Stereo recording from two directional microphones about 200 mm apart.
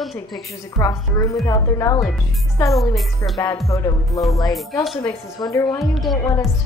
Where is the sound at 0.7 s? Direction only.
15° left (ahead or behind).